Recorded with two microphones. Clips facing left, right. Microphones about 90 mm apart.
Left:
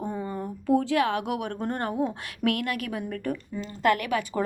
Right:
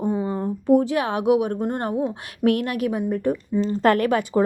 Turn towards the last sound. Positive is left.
turn(degrees=-30)  # may be behind; listen again after turning